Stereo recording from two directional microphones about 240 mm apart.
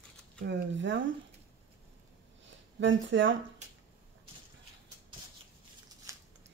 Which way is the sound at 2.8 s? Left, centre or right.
Right.